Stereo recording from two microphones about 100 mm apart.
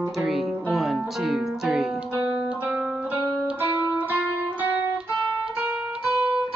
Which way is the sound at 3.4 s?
20° right (ahead or behind).